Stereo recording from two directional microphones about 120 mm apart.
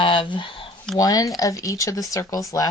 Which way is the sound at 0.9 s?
30° left (ahead or behind).